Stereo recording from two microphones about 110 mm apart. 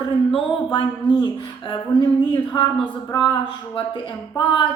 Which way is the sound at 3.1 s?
45° left (ahead or behind).